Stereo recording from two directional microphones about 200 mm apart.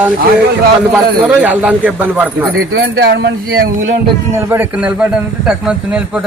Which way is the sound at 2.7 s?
55° right (ahead or behind).